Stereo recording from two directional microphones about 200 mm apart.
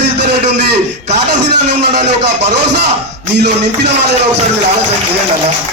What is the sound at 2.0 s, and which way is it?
A man's voice, 55° right (ahead or behind).